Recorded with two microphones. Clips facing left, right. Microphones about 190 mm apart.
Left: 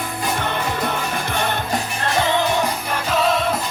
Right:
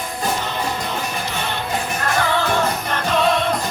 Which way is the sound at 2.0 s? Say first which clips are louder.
Left 1 dB; 20° left (ahead or behind).